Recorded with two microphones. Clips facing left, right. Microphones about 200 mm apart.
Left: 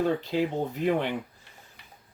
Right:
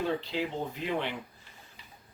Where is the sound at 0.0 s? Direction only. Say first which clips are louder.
Left 5 dB; 45° left (ahead or behind).